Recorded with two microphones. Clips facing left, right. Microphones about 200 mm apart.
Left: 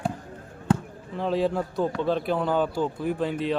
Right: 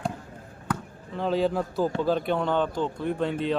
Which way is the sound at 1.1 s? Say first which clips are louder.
Even; centre (ahead or behind).